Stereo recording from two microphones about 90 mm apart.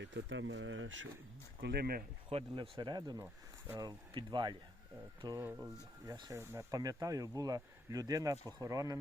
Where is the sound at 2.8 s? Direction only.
50° right (ahead or behind).